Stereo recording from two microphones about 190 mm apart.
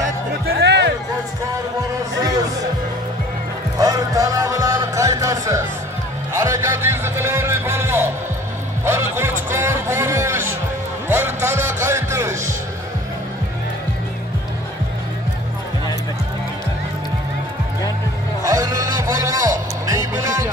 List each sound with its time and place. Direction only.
0.0 s music: 65° right (ahead or behind)
3.7 s music: 20° right (ahead or behind)
6.3 s speech: 15° right (ahead or behind)
8.8 s music: 15° right (ahead or behind)
18.4 s music: 15° right (ahead or behind)